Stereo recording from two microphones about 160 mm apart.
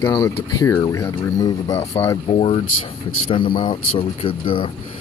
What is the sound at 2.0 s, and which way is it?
Speech, 35° left (ahead or behind).